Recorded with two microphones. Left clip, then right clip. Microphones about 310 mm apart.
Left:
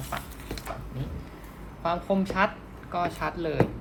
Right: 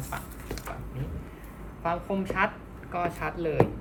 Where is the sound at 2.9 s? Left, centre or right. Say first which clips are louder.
Left 1 dB; left.